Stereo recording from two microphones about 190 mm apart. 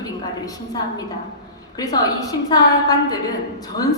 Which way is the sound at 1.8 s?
20° left (ahead or behind).